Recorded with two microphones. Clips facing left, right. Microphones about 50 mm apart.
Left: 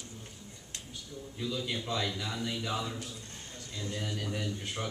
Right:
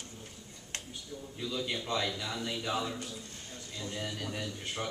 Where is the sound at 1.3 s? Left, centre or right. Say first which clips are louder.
Even; centre.